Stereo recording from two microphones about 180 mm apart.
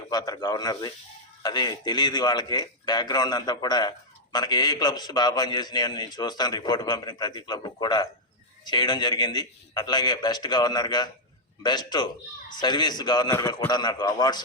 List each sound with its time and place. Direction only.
0.1 s a man's voice: 20° left (ahead or behind)